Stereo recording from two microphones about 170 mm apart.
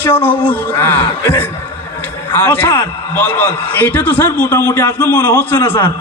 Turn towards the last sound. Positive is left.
turn(degrees=15)  # may be behind; listen again after turning